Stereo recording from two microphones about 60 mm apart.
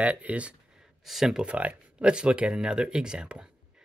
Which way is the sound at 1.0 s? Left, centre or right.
Centre.